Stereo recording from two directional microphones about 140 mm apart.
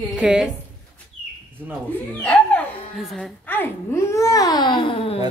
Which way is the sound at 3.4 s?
15° left (ahead or behind).